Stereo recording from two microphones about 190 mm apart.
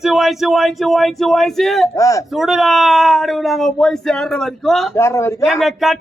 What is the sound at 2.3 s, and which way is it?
Speech, centre (ahead or behind).